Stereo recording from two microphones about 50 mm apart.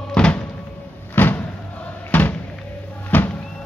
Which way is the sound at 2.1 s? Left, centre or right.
Left.